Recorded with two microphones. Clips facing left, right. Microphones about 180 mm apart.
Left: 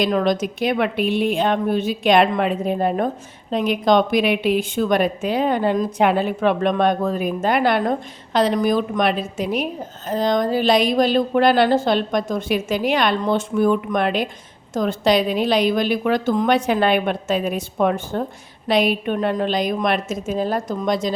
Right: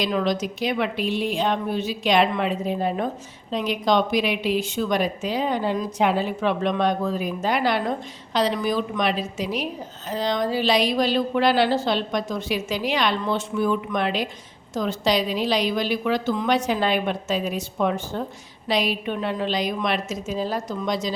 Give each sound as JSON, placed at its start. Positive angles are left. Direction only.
{"t": 0.0, "sound": "a woman's voice", "side_deg": 50}